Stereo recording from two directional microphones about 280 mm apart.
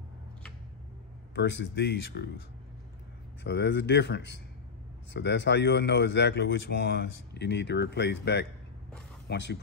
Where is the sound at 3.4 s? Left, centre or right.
Left.